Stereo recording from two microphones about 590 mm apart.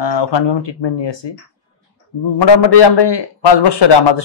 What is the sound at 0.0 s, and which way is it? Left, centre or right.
A man's voice, left.